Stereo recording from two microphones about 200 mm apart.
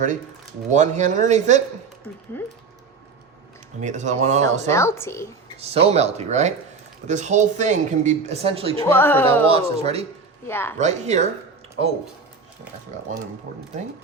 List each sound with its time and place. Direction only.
0.7 s speech: 35° right (ahead or behind)
2.3 s a woman's voice: 10° left (ahead or behind)
3.8 s speech: 35° right (ahead or behind)
4.7 s a woman's voice: 15° left (ahead or behind)
5.5 s speech: 30° right (ahead or behind)
8.9 s a woman's voice: 10° left (ahead or behind)
9.5 s speech: 30° right (ahead or behind)
10.4 s a woman's voice: 10° left (ahead or behind)
10.8 s speech: 35° right (ahead or behind)